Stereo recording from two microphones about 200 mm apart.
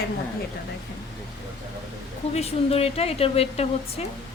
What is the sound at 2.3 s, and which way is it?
A woman's voice, 30° left (ahead or behind).